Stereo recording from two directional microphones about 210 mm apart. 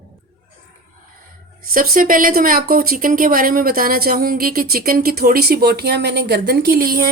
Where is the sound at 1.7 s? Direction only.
40° right (ahead or behind).